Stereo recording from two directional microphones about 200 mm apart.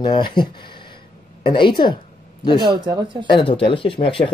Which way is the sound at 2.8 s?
25° right (ahead or behind).